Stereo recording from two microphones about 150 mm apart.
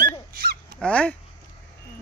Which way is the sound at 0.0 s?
80° right.